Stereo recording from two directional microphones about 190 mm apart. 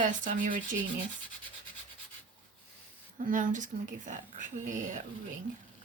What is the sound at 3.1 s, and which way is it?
Speech, 45° right (ahead or behind).